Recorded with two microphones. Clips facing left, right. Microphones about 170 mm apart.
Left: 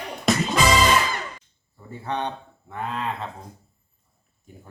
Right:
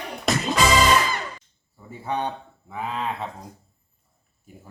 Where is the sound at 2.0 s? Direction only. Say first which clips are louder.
Right 1 dB; 10° right (ahead or behind).